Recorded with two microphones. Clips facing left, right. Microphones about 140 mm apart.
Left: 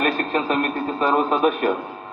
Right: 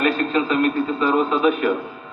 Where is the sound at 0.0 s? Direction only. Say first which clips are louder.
Right 2 dB; 45° left (ahead or behind).